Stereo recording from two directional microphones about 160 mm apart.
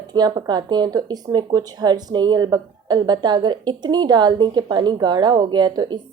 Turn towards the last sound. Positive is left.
turn(degrees=-30)  # may be behind; listen again after turning